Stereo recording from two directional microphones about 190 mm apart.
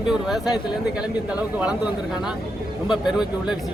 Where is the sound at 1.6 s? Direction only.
5° right (ahead or behind).